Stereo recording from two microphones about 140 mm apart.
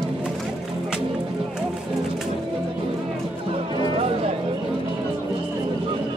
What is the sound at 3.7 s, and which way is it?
Music, 40° right (ahead or behind).